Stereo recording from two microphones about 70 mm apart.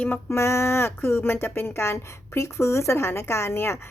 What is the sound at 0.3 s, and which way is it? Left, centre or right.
A woman's voice, left.